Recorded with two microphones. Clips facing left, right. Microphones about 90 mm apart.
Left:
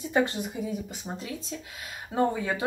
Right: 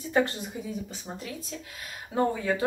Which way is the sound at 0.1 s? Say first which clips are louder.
Even; 15° left (ahead or behind).